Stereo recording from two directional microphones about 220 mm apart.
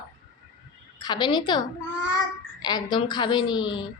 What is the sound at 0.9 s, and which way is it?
A woman's voice, 20° left (ahead or behind).